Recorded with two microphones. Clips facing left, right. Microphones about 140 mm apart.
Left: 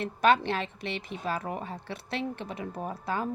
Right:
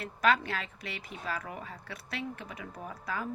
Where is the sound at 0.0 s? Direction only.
25° left (ahead or behind).